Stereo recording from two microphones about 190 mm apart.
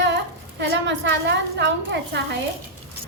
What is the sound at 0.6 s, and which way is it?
A woman's voice, 65° right (ahead or behind).